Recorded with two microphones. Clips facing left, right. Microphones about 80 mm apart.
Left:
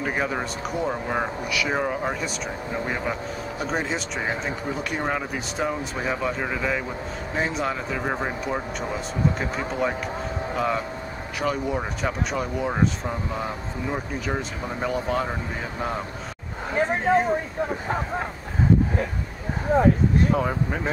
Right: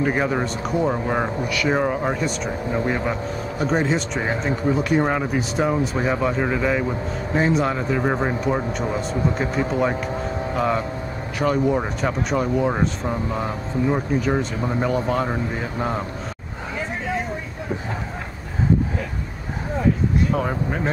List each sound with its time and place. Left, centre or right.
0.0 s speech: centre
16.7 s a sound: left
20.3 s speech: centre